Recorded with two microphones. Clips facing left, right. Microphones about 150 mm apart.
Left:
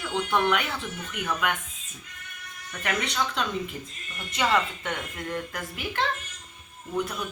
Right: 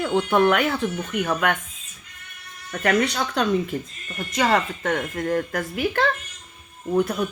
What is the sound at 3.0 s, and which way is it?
A woman's voice, 40° right (ahead or behind).